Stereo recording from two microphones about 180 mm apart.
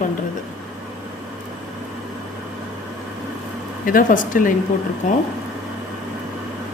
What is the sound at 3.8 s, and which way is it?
Speech, 50° left (ahead or behind).